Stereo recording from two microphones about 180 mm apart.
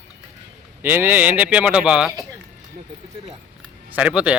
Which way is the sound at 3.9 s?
5° right (ahead or behind).